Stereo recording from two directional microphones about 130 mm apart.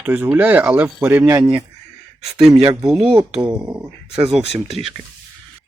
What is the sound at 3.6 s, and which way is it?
Speech, 25° right (ahead or behind).